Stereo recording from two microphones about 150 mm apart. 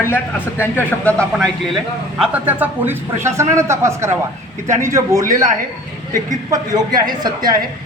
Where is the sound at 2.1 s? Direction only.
10° right (ahead or behind).